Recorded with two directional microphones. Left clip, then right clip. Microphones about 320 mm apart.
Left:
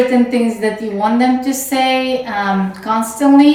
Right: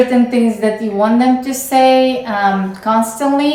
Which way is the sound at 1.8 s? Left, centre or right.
Right.